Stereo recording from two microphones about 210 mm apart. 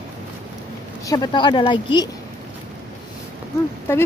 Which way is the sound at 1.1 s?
20° left (ahead or behind).